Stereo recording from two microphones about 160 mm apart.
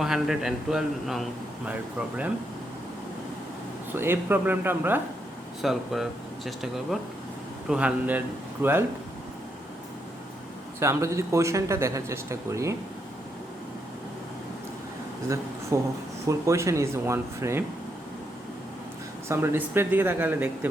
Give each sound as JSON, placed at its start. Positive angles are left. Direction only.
{"t": 0.0, "sound": "speech", "side_deg": -5}
{"t": 3.9, "sound": "speech", "side_deg": -15}
{"t": 5.6, "sound": "speech", "side_deg": 0}
{"t": 10.8, "sound": "speech", "side_deg": -20}
{"t": 15.7, "sound": "speech", "side_deg": -15}
{"t": 19.3, "sound": "speech", "side_deg": -15}